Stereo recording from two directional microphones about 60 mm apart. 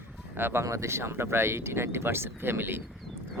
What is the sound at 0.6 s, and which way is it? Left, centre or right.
Speech, right.